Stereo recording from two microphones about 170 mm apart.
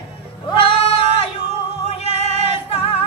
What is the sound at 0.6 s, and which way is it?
Singing, 35° left (ahead or behind).